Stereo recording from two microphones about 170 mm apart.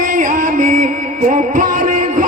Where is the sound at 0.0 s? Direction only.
50° right (ahead or behind).